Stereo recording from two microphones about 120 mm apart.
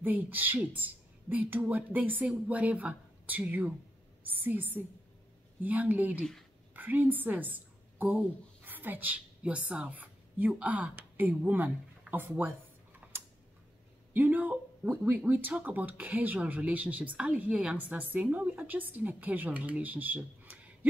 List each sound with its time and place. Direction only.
0.0 s a woman's voice: 15° right (ahead or behind)
14.1 s speech: 15° right (ahead or behind)